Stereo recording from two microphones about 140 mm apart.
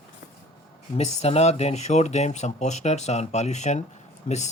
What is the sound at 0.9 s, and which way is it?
Speech, 50° left (ahead or behind).